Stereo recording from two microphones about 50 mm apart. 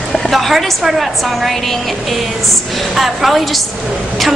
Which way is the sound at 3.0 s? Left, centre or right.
Centre.